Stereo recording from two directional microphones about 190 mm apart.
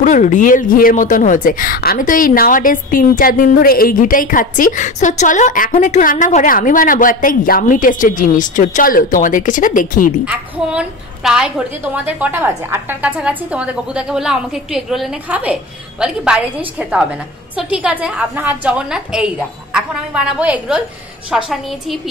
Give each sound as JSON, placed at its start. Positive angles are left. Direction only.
{"t": 0.0, "sound": "a woman's voice", "side_deg": 40}
{"t": 10.2, "sound": "a woman's voice", "side_deg": -5}